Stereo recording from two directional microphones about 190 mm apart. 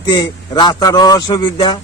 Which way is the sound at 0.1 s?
25° left (ahead or behind).